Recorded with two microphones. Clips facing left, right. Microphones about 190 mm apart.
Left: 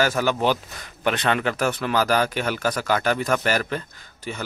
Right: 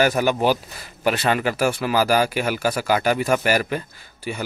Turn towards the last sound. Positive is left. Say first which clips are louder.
# right 3 dB
turn(degrees=-10)  # may be behind; listen again after turning